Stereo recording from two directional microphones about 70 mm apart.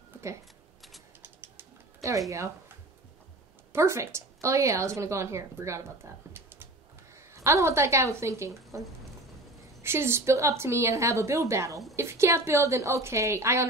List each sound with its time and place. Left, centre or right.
1.2 s bird: right
2.0 s a sound: right
3.7 s a woman's voice: right
9.8 s a woman's voice: right